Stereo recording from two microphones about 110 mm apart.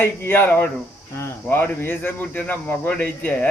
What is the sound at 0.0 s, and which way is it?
Speech, 20° left (ahead or behind).